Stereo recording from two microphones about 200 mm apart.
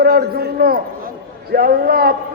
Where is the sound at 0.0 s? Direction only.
50° right (ahead or behind).